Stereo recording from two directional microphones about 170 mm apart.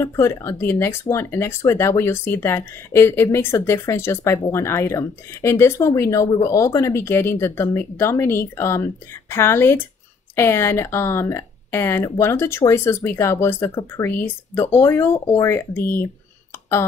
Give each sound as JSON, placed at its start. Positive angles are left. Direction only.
{"t": 0.0, "sound": "speech", "side_deg": 15}